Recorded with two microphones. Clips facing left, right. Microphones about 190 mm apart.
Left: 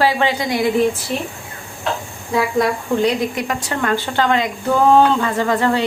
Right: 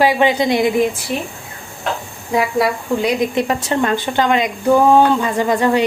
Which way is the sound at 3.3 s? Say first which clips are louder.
Right 5 dB; 25° right (ahead or behind).